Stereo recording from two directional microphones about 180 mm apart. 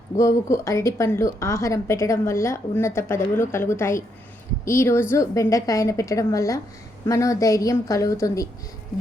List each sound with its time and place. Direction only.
0.2 s a woman's voice: 15° left (ahead or behind)